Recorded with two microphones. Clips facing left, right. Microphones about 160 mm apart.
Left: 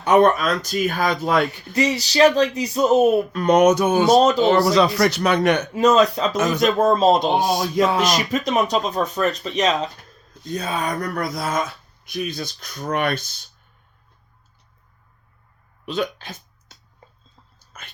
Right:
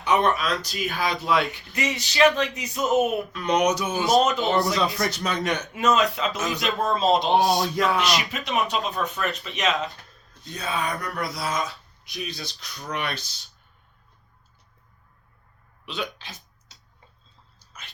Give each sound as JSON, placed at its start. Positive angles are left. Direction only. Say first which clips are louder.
{"t": 0.0, "sound": "speech", "louder": "left 7 dB", "side_deg": 45}
{"t": 3.3, "sound": "speech", "louder": "left 5 dB", "side_deg": 50}
{"t": 4.2, "sound": "speech", "louder": "left 6 dB", "side_deg": 35}
{"t": 4.6, "sound": "speech", "louder": "left 8 dB", "side_deg": 80}
{"t": 5.7, "sound": "speech", "louder": "left 5 dB", "side_deg": 40}
{"t": 7.3, "sound": "speech", "louder": "even", "side_deg": 20}
{"t": 7.9, "sound": "speech", "louder": "left 5 dB", "side_deg": 40}
{"t": 15.9, "sound": "speech", "louder": "left 8 dB", "side_deg": 45}
{"t": 17.7, "sound": "whispering", "louder": "left 3 dB", "side_deg": 50}